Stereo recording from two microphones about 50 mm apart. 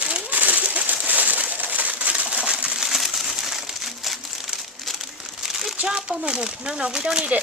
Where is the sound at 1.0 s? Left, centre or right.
Right.